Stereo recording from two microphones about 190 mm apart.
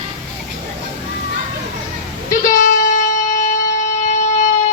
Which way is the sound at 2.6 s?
45° left (ahead or behind).